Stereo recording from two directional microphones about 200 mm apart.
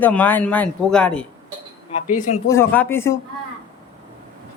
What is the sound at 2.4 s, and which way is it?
Speech, 10° left (ahead or behind).